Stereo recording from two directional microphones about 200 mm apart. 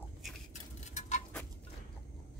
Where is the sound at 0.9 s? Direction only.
35° left (ahead or behind).